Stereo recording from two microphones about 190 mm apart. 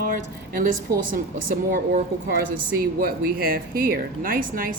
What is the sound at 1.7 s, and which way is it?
A woman's voice, 50° right (ahead or behind).